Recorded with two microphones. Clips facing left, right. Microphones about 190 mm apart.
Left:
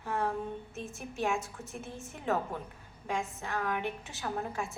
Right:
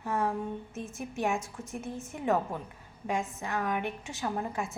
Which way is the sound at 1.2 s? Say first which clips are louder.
Right 1 dB; 20° right (ahead or behind).